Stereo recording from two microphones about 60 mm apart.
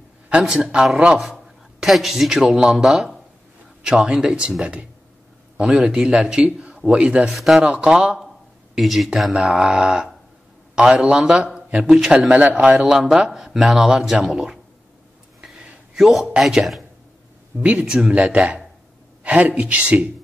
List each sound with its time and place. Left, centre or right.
0.3 s speech: centre
1.2 s a man's voice: centre
7.2 s speech: centre
9.4 s speech: centre
11.8 s speech: centre
12.1 s a man's voice: centre
12.9 s speech: centre
15.4 s a sound: centre
17.6 s speech: centre
19.2 s a woman's voice: right